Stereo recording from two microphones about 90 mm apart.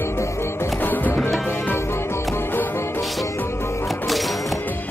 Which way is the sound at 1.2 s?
Centre (ahead or behind).